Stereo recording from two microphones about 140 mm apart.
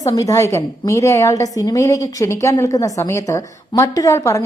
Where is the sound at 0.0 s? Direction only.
25° left (ahead or behind).